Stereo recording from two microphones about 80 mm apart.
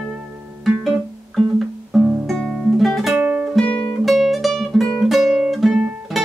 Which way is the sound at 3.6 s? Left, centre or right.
Centre.